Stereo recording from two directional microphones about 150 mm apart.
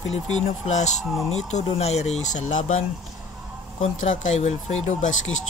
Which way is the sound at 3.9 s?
55° left (ahead or behind).